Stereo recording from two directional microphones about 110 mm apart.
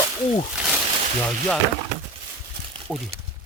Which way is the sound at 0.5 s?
10° right (ahead or behind).